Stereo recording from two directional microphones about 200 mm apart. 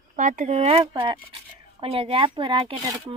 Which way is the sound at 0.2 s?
40° right (ahead or behind).